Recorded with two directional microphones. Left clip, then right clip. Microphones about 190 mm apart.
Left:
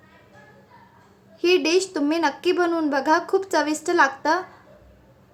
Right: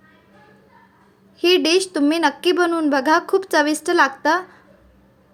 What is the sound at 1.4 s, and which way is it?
Speech, 20° right (ahead or behind).